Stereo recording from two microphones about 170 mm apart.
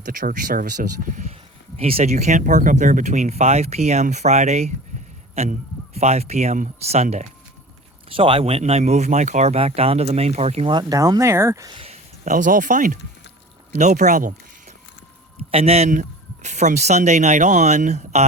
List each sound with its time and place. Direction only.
0.0 s a man's voice: 50° right (ahead or behind)
1.7 s speech: 35° right (ahead or behind); by 11.8 s 20° right (ahead or behind)
11.8 s a man's voice: 40° right (ahead or behind)
15.5 s a man's voice: 35° right (ahead or behind)